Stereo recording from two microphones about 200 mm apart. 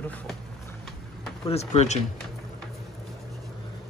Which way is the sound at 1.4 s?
30° left (ahead or behind).